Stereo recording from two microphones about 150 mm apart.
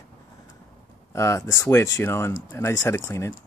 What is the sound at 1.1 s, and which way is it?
Speech, 20° left (ahead or behind).